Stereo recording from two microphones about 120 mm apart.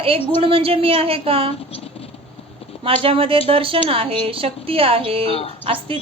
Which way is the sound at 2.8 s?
50° right (ahead or behind).